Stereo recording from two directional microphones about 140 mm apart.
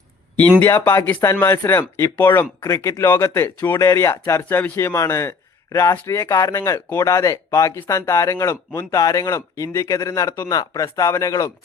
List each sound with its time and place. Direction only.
0.6 s speech: 20° left (ahead or behind)